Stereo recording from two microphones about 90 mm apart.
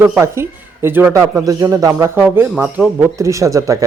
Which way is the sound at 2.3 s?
25° right (ahead or behind).